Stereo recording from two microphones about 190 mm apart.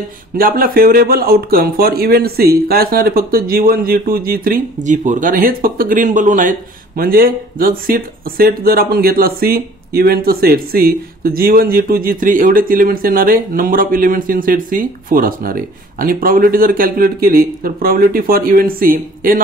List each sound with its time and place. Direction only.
0.4 s speech: 50° right (ahead or behind)